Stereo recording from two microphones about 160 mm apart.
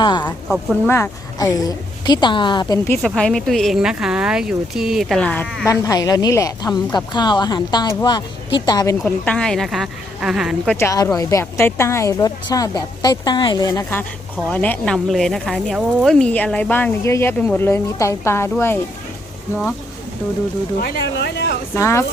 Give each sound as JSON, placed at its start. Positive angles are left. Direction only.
{"t": 0.0, "sound": "a woman's voice", "side_deg": 30}
{"t": 0.4, "sound": "speech", "side_deg": 0}
{"t": 0.9, "sound": "a woman's voice", "side_deg": 15}
{"t": 3.0, "sound": "speech", "side_deg": 5}
{"t": 5.6, "sound": "a woman's voice", "side_deg": 20}
{"t": 9.0, "sound": "speech", "side_deg": 10}
{"t": 10.8, "sound": "a woman's voice", "side_deg": 20}
{"t": 14.5, "sound": "speech", "side_deg": 10}
{"t": 20.8, "sound": "speech", "side_deg": 85}
{"t": 21.8, "sound": "speech", "side_deg": 20}